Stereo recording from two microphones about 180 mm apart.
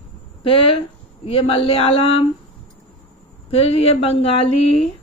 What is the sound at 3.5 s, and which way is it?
A woman's voice, 35° left (ahead or behind).